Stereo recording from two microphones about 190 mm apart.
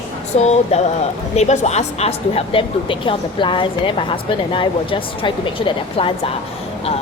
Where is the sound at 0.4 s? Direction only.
35° left (ahead or behind).